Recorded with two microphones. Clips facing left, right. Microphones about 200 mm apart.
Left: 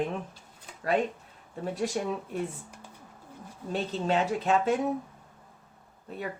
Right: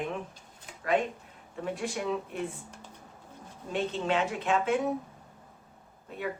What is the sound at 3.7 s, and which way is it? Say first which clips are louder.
Speech: left 1 dB; 35° left (ahead or behind).